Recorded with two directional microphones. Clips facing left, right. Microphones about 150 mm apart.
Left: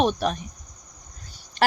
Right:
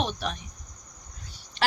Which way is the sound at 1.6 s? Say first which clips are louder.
Left 6 dB; 45° left (ahead or behind).